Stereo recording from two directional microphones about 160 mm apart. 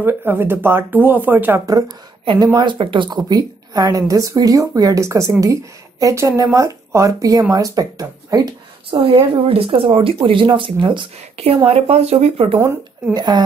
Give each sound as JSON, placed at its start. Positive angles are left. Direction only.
{"t": 0.0, "sound": "speech", "side_deg": -15}
{"t": 1.8, "sound": "speech", "side_deg": -25}
{"t": 8.9, "sound": "speech", "side_deg": -35}
{"t": 13.1, "sound": "speech", "side_deg": -25}